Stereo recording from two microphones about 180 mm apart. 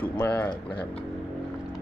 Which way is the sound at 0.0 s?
10° left (ahead or behind).